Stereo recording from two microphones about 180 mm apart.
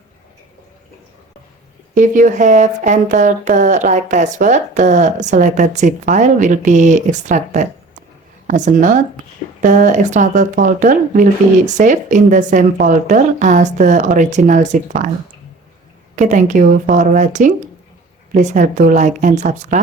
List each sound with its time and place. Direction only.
2.0 s speech: 45° right (ahead or behind)
16.1 s speech: 40° right (ahead or behind)